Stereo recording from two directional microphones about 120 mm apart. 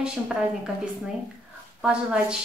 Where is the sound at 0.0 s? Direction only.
5° right (ahead or behind).